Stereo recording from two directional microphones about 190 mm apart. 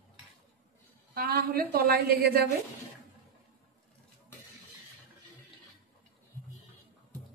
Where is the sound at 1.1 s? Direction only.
55° right (ahead or behind).